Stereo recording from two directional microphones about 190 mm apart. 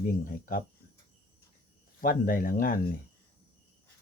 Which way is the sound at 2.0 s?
50° left (ahead or behind).